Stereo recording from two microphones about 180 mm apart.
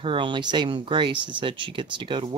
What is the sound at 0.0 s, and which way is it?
Speech, 25° right (ahead or behind).